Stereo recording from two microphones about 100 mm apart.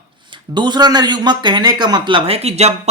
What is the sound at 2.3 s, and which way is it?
Speech, 90° right.